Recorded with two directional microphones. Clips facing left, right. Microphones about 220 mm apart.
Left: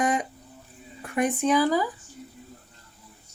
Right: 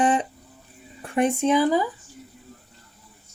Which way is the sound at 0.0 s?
30° right (ahead or behind).